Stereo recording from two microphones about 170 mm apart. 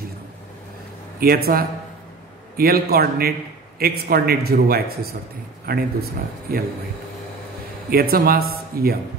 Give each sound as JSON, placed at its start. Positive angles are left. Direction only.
{"t": 1.2, "sound": "a man's voice", "side_deg": -65}
{"t": 7.9, "sound": "a man's voice", "side_deg": -60}